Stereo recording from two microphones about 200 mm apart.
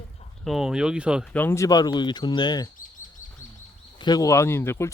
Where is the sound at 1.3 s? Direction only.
10° left (ahead or behind).